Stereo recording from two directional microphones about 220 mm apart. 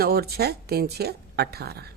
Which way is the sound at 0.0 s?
45° right (ahead or behind).